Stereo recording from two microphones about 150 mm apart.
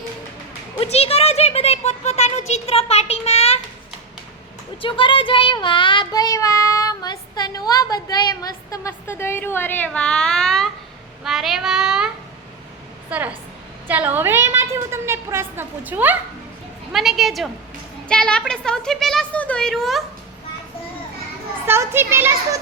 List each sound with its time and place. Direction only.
0.8 s a child's voice: 40° left (ahead or behind)
4.8 s child singing: 35° left (ahead or behind); by 10.7 s 5° left (ahead or behind)
11.2 s a woman's voice: centre (ahead or behind)
21.7 s a woman's voice: 15° right (ahead or behind)